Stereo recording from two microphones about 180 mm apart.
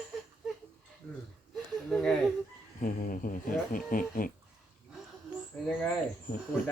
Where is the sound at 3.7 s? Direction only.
50° left (ahead or behind).